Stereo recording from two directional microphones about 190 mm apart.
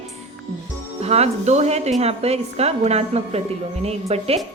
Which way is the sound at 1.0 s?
35° right (ahead or behind).